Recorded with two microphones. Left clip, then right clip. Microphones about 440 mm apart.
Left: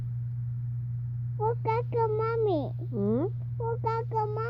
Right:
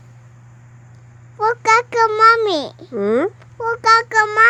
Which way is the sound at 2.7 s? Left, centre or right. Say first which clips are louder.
Right 12 dB; centre.